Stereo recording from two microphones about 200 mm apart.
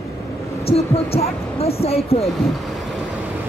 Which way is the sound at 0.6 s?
30° left (ahead or behind).